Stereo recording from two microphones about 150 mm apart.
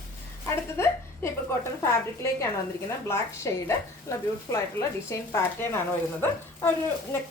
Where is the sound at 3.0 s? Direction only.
15° left (ahead or behind).